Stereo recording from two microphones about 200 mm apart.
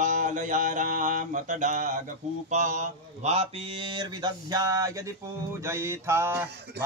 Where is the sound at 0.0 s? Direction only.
40° right (ahead or behind).